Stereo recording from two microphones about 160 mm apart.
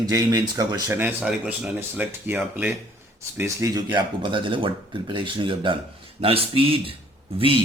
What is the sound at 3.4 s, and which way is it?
Speech, 20° right (ahead or behind).